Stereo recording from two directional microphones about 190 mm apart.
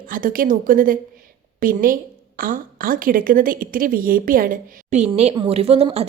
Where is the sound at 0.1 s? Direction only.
45° right (ahead or behind).